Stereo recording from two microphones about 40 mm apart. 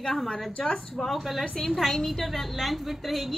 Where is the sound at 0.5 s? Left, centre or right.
Left.